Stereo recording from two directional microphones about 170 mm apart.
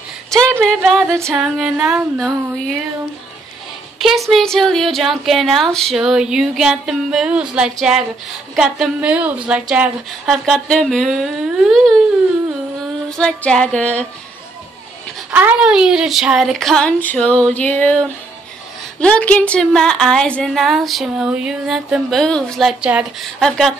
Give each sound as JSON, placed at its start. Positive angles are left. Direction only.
{"t": 0.3, "sound": "a sound", "side_deg": -15}
{"t": 0.7, "sound": "a woman's voice", "side_deg": 0}
{"t": 1.0, "sound": "female singing", "side_deg": -15}
{"t": 1.4, "sound": "a woman's voice", "side_deg": -5}
{"t": 4.0, "sound": "a woman's voice", "side_deg": 0}
{"t": 13.2, "sound": "music", "side_deg": 5}
{"t": 15.3, "sound": "a woman's voice", "side_deg": -5}